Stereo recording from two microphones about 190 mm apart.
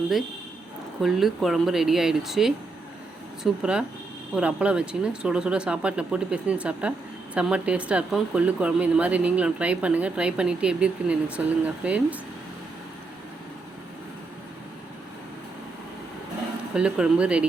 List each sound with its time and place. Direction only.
1.0 s speech: centre (ahead or behind)
16.7 s speech: 5° right (ahead or behind)